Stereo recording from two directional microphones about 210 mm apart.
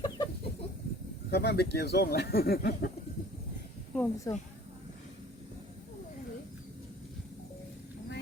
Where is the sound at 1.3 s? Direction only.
50° left (ahead or behind).